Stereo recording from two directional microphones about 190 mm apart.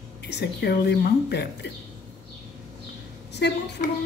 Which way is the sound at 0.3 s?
60° left (ahead or behind).